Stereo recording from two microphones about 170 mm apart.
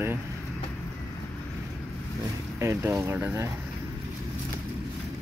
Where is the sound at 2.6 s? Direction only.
15° right (ahead or behind).